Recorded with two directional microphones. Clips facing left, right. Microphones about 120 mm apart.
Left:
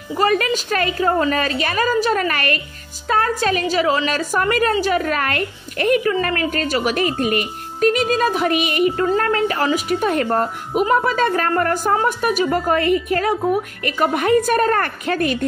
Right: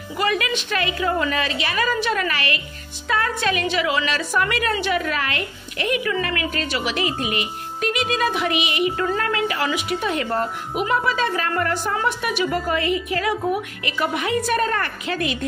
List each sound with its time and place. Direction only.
0.2 s a woman's voice: 40° left (ahead or behind)